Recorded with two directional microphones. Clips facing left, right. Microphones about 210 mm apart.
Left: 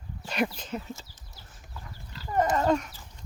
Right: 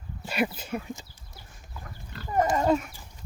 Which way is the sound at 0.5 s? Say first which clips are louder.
Right 2 dB; 10° right (ahead or behind).